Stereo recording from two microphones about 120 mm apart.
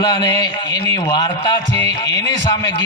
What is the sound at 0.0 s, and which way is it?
Speech, 30° left (ahead or behind).